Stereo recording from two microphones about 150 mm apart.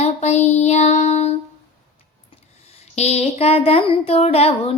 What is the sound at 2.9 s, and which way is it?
Speech, 45° left (ahead or behind).